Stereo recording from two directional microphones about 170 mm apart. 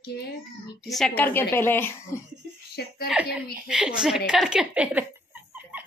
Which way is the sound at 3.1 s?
5° right (ahead or behind).